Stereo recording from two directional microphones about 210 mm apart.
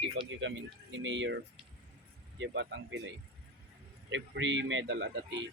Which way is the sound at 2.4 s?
60° right (ahead or behind).